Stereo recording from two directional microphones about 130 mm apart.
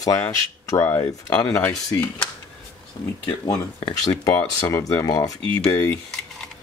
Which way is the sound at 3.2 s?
30° left (ahead or behind).